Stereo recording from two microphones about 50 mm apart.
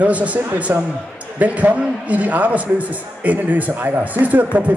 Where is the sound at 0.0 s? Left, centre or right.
Right.